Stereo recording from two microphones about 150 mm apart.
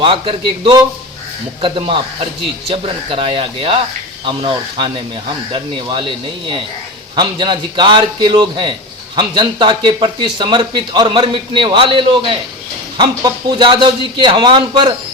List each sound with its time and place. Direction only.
0.0 s speech: 35° right (ahead or behind)
7.2 s speech: 30° right (ahead or behind)